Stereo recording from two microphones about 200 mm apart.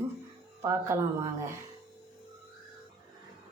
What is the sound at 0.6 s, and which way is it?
Speech, 15° right (ahead or behind).